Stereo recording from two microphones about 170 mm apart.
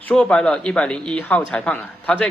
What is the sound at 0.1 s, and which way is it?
A man's voice, 5° left (ahead or behind).